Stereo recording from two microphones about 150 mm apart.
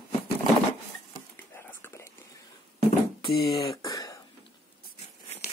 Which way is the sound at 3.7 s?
20° left (ahead or behind).